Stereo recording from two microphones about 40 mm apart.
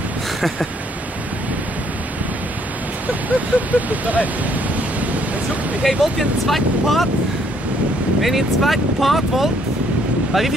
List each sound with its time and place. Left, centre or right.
3.1 s speech: right
5.0 s a sound: right
5.9 s speech: centre
8.2 s speech: centre